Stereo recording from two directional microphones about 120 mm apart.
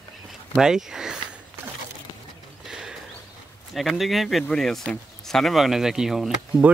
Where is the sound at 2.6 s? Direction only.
5° right (ahead or behind).